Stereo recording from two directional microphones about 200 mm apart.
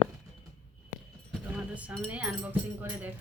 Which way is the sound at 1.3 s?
5° right (ahead or behind).